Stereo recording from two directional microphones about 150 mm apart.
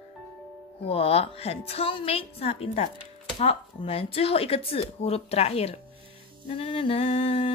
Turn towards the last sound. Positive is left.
turn(degrees=40)  # may be behind; listen again after turning